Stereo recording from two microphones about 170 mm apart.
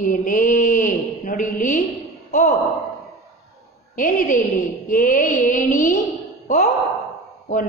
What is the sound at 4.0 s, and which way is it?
A woman's voice, 50° left (ahead or behind).